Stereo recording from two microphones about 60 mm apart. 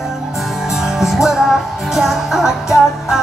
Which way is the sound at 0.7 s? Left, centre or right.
Centre.